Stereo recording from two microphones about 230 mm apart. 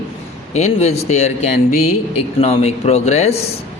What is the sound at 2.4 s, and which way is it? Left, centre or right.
Speech, left.